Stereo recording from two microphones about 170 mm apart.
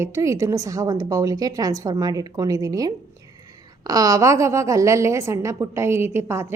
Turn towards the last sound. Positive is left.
turn(degrees=-15)  # may be behind; listen again after turning